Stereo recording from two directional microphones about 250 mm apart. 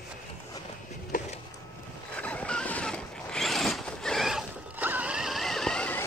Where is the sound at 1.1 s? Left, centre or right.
Left.